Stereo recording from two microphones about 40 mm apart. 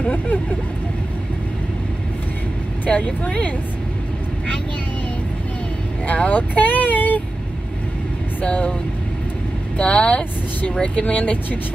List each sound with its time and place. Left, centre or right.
0.1 s speech: left
2.9 s speech: left
6.0 s speech: left
8.4 s speech: left
9.8 s speech: left
11.1 s speech: left